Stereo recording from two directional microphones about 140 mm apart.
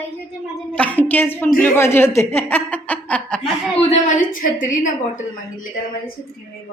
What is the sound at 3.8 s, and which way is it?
A woman's voice, 55° left (ahead or behind).